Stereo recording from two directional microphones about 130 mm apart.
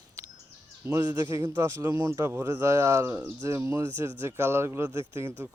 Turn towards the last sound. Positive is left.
turn(degrees=-20)  # may be behind; listen again after turning